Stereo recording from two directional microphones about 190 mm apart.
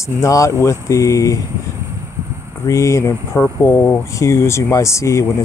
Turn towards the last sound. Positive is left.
turn(degrees=15)  # may be behind; listen again after turning